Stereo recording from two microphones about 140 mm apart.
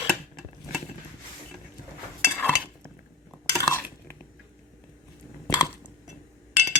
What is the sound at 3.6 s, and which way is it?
Dishes, 20° left (ahead or behind).